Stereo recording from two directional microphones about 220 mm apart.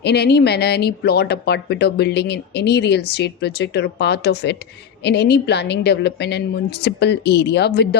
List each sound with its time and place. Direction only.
0.0 s speech: 50° left (ahead or behind)